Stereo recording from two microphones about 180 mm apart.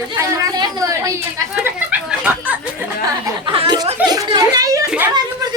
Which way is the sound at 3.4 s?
30° right (ahead or behind).